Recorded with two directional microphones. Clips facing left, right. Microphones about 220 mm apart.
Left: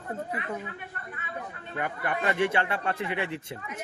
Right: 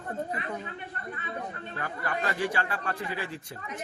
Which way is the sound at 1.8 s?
20° left (ahead or behind).